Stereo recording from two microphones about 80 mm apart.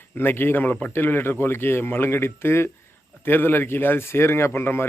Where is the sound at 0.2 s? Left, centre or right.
Left.